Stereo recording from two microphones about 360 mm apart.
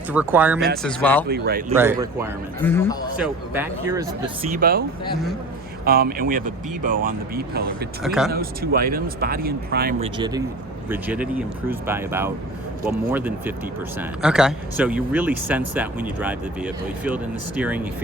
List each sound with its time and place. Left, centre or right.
0.1 s speech: centre
1.3 s speech: right
1.7 s speech: centre
2.6 s a man's voice: centre
3.2 s speech: centre
4.5 s speech: right
5.8 s speech: right
8.0 s speech: centre
8.3 s speech: right
10.2 s speech: centre